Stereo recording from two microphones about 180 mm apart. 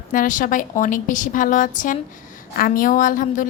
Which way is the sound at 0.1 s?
45° left (ahead or behind).